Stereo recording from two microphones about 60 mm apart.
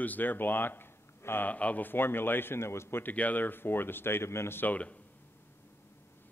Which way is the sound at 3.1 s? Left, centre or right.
Left.